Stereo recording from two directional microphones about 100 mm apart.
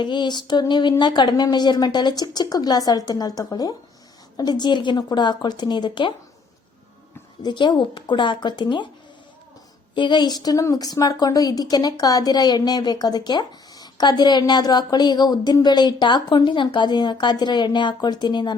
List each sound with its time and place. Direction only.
0.0 s a woman's voice: 50° left (ahead or behind)
7.4 s a woman's voice: 50° left (ahead or behind)
9.9 s a woman's voice: 50° left (ahead or behind)